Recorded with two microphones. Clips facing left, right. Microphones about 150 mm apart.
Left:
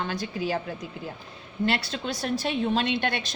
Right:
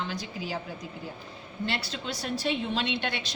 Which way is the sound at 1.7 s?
55° left (ahead or behind).